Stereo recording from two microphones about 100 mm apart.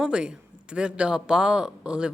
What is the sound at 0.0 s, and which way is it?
A man's voice, 10° right (ahead or behind).